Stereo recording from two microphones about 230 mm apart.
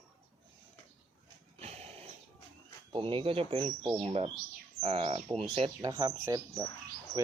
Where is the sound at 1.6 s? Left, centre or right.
Right.